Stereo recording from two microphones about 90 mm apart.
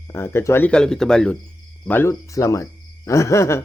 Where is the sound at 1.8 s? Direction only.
25° left (ahead or behind).